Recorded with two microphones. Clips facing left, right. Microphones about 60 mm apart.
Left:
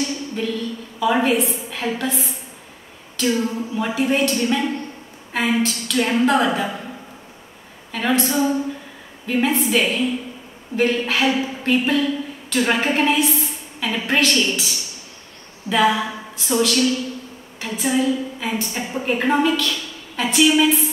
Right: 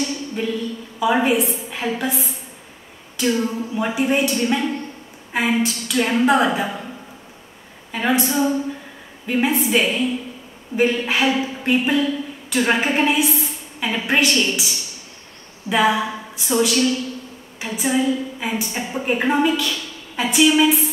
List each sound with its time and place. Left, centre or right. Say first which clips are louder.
0.4 s a woman's voice: right 1 dB; centre
7.9 s a woman's voice: right 1 dB; centre
8.3 s a woman's voice: even; centre
9.2 s a woman's voice: even; centre
15.7 s a woman's voice: even; centre
19.7 s a sound: even; centre
20.5 s a woman's voice: right 1 dB; centre